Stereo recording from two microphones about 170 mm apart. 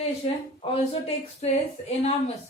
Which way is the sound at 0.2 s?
35° left (ahead or behind).